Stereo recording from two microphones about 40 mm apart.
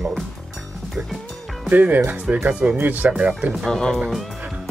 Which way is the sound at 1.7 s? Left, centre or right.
Right.